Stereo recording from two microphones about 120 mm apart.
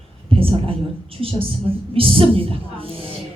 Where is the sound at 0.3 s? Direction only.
50° right (ahead or behind).